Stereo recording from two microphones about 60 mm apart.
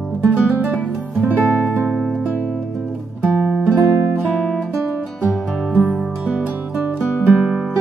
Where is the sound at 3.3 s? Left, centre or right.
Centre.